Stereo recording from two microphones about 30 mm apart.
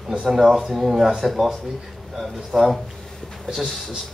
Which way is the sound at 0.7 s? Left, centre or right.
Centre.